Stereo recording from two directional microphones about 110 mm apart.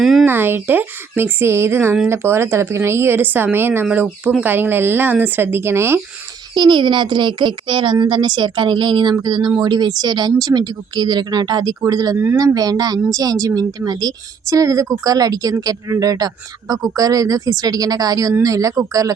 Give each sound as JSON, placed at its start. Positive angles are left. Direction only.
{"t": 0.0, "sound": "speech", "side_deg": 0}
{"t": 0.3, "sound": "speech", "side_deg": -20}
{"t": 6.5, "sound": "a woman's voice", "side_deg": -45}
{"t": 12.1, "sound": "speech", "side_deg": -20}
{"t": 12.5, "sound": "speech", "side_deg": -35}